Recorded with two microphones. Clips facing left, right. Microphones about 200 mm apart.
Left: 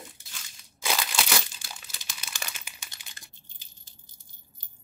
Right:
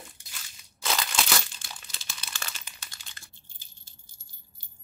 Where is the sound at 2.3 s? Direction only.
10° left (ahead or behind).